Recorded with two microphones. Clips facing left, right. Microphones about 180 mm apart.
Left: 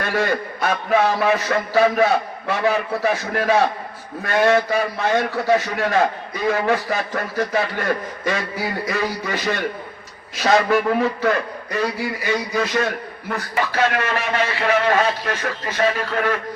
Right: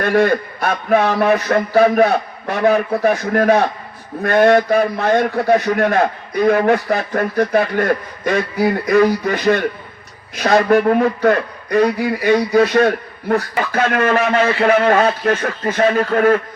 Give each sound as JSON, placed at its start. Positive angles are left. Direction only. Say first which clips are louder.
{"t": 0.0, "sound": "a man's voice", "louder": "right 7 dB", "side_deg": -60}
{"t": 12.8, "sound": "a man's voice", "louder": "right 8 dB", "side_deg": -40}